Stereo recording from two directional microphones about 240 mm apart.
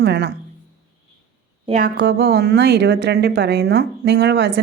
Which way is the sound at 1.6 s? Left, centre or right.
Right.